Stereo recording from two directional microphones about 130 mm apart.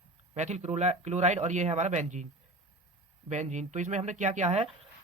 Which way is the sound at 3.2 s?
65° right (ahead or behind).